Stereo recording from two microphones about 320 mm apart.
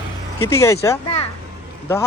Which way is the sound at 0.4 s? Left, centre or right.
Centre.